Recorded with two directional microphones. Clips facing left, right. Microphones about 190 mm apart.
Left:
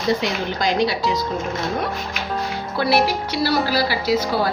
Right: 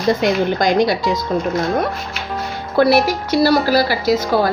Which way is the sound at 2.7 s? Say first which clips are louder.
Right 6 dB; 45° right (ahead or behind).